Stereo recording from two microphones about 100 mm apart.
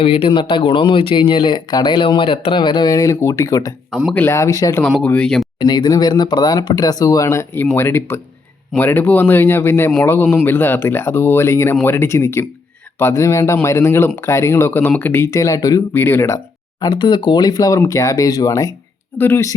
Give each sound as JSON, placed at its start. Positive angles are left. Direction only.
{"t": 0.0, "sound": "speech", "side_deg": 65}
{"t": 4.1, "sound": "speech", "side_deg": 20}
{"t": 4.4, "sound": "speech", "side_deg": 35}
{"t": 5.0, "sound": "speech", "side_deg": 10}
{"t": 5.5, "sound": "speech", "side_deg": 45}
{"t": 15.9, "sound": "speech", "side_deg": 25}
{"t": 16.8, "sound": "speech", "side_deg": 50}
{"t": 19.1, "sound": "speech", "side_deg": 20}